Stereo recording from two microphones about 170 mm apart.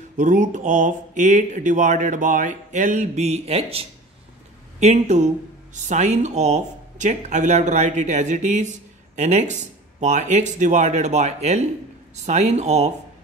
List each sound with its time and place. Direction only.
0.2 s speech: 50° right (ahead or behind)